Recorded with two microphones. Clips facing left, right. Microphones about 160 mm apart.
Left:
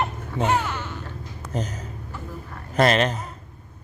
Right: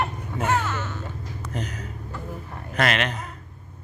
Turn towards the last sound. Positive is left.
turn(degrees=35)  # may be behind; listen again after turning